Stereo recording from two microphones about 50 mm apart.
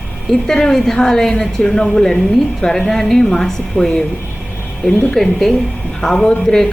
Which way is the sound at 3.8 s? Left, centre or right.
Left.